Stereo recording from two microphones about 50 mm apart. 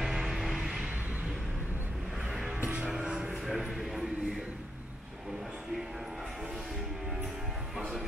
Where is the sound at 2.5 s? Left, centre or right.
Right.